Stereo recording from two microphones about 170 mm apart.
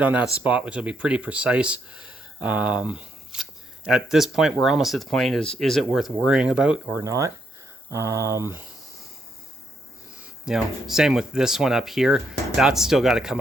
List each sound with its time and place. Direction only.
0.0 s speech: 10° right (ahead or behind)
7.0 s speech: 20° right (ahead or behind)
10.4 s speech: centre (ahead or behind)